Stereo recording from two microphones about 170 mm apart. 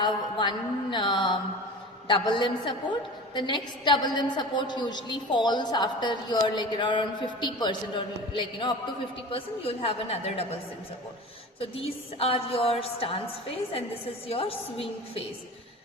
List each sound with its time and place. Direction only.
0.0 s a woman's voice: 25° left (ahead or behind)
11.6 s a woman's voice: 35° left (ahead or behind)